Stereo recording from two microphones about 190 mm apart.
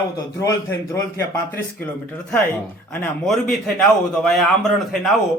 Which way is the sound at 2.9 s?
5° left (ahead or behind).